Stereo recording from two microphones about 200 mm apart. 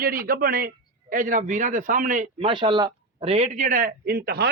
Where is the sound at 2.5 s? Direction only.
25° right (ahead or behind).